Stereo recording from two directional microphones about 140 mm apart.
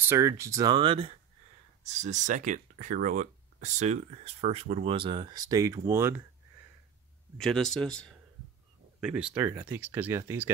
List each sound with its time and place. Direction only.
0.0 s speech: 20° right (ahead or behind); by 1.1 s 35° right (ahead or behind)
1.8 s speech: 55° right (ahead or behind)
4.9 s speech: 35° right (ahead or behind); by 6.2 s 20° right (ahead or behind)
7.3 s speech: 5° left (ahead or behind)
9.0 s speech: 5° right (ahead or behind)